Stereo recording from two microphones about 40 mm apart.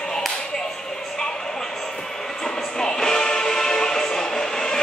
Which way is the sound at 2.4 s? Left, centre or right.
Centre.